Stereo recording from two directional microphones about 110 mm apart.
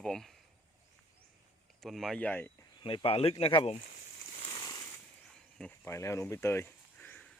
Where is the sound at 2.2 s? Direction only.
15° left (ahead or behind).